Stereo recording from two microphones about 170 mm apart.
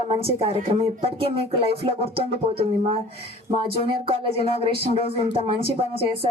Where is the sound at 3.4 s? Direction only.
30° right (ahead or behind).